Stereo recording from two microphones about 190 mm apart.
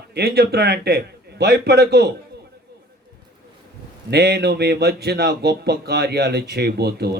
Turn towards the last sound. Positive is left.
turn(degrees=-55)  # may be behind; listen again after turning